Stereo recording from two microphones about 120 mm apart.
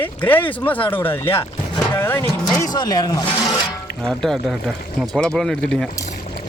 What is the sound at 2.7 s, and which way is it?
Speech, 35° left (ahead or behind).